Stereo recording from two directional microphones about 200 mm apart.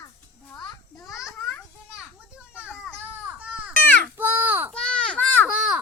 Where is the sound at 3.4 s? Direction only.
5° right (ahead or behind).